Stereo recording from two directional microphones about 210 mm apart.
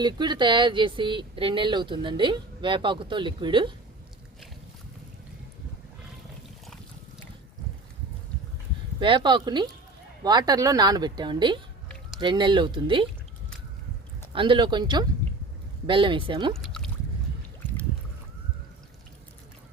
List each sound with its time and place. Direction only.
0.0 s speech: 20° right (ahead or behind)
9.0 s speech: 25° right (ahead or behind)
14.3 s speech: 25° right (ahead or behind)
16.6 s a sound: centre (ahead or behind)